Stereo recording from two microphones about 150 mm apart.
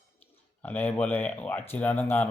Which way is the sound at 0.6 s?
10° left (ahead or behind).